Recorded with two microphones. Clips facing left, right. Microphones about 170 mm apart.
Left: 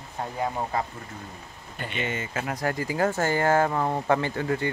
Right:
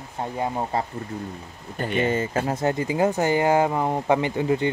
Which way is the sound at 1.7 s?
45° right (ahead or behind).